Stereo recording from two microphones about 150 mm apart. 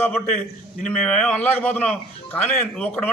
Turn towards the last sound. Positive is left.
turn(degrees=10)  # may be behind; listen again after turning